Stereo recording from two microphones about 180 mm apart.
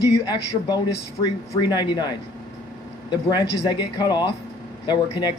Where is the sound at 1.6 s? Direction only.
25° left (ahead or behind).